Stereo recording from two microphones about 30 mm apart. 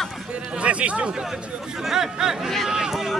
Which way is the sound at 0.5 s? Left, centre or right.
Right.